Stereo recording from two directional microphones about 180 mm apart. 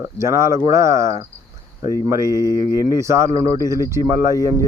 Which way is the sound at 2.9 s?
15° right (ahead or behind).